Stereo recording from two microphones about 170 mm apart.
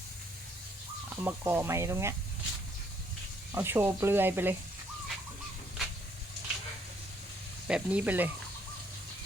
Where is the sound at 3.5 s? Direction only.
15° right (ahead or behind).